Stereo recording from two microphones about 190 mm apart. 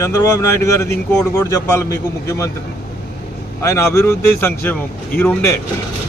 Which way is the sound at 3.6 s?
15° left (ahead or behind).